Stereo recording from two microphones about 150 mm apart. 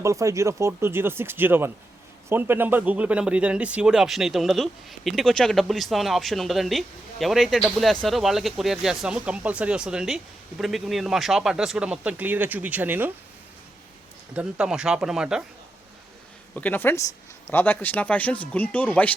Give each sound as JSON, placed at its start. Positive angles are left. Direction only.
{"t": 0.0, "sound": "speech", "side_deg": -20}
{"t": 14.3, "sound": "speech", "side_deg": -5}
{"t": 16.6, "sound": "speech", "side_deg": 10}